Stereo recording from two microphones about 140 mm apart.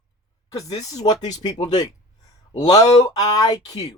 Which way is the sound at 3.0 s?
25° left (ahead or behind).